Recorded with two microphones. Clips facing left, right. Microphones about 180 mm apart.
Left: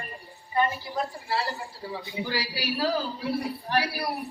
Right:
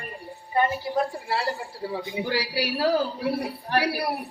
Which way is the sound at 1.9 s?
15° right (ahead or behind).